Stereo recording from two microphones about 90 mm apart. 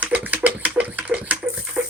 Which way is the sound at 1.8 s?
5° right (ahead or behind).